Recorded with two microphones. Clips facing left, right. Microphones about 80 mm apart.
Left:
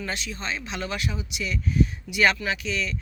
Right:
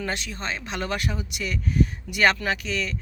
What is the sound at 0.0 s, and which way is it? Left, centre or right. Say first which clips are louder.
Speech: right 2 dB; right.